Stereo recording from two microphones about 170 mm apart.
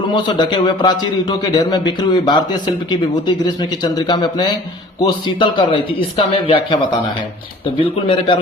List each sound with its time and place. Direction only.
0.1 s a man's voice: 25° left (ahead or behind)
8.0 s speech: 30° left (ahead or behind)